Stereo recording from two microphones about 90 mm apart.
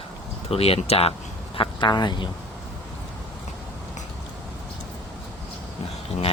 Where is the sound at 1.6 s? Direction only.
75° left (ahead or behind).